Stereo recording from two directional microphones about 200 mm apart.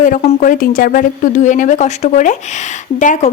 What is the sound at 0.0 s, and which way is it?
A woman's voice, 40° left (ahead or behind).